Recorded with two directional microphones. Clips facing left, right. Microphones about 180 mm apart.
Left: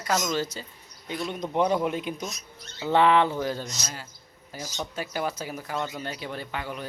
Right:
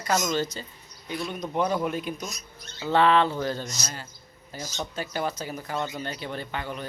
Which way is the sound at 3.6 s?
Centre (ahead or behind).